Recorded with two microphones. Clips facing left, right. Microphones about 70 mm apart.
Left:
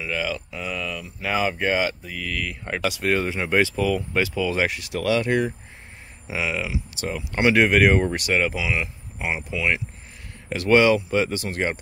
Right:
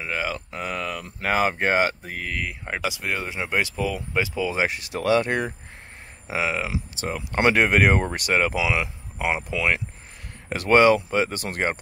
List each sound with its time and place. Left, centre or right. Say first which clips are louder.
0.0 s speech: left 1 dB; right
2.2 s speech: left 1 dB; right
2.6 s speech: left 7 dB; centre
4.6 s speech: right 1 dB; right
8.5 s speech: right 2 dB; right
10.5 s speech: right 1 dB; right